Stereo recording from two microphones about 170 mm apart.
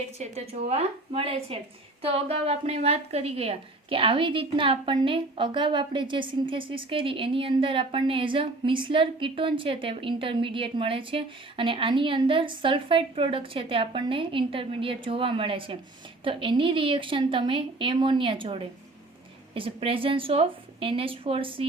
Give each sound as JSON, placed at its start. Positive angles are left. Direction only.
{"t": 0.2, "sound": "a woman's voice", "side_deg": -40}